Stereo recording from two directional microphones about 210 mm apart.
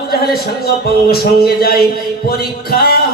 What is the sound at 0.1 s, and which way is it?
Speech, 45° left (ahead or behind).